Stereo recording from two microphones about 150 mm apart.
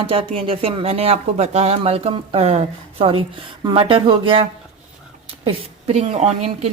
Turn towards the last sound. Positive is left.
turn(degrees=-45)  # may be behind; listen again after turning